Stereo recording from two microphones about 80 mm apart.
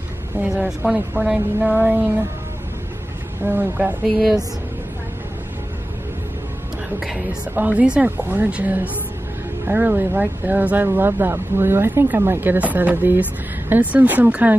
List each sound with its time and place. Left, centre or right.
0.4 s a sound: centre
3.4 s speech: right
4.0 s a woman's voice: centre
7.5 s speech: centre
8.2 s speech: right